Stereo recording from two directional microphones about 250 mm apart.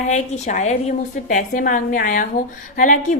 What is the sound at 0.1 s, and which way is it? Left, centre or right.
A woman's voice, left.